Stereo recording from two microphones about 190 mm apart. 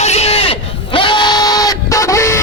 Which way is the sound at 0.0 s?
35° left (ahead or behind).